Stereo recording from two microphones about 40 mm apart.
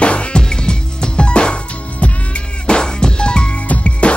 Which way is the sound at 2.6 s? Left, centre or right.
Left.